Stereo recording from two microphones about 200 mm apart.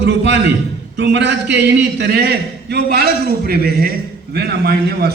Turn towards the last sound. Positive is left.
turn(degrees=-50)  # may be behind; listen again after turning